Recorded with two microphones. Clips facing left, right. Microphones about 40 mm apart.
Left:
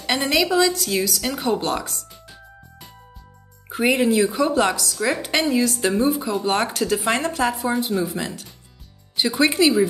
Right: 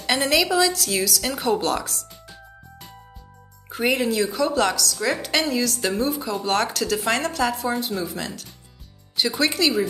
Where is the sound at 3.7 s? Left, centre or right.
Centre.